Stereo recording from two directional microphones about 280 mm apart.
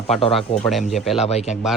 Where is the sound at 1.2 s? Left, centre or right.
Left.